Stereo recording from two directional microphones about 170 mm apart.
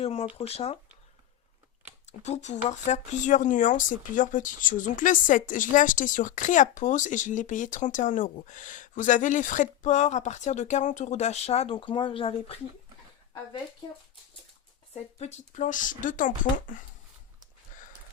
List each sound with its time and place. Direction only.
0.0 s speech: 35° left (ahead or behind)
2.0 s speech: 40° left (ahead or behind)
15.2 s speech: 45° left (ahead or behind)